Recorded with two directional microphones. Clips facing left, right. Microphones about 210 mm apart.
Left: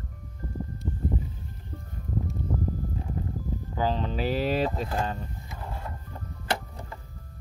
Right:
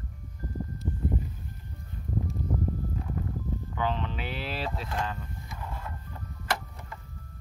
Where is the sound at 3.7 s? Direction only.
35° left (ahead or behind).